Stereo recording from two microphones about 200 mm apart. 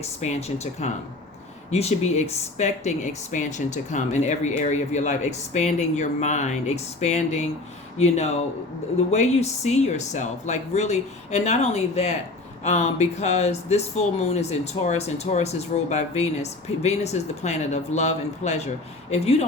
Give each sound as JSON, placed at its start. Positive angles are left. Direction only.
{"t": 0.2, "sound": "speech", "side_deg": 35}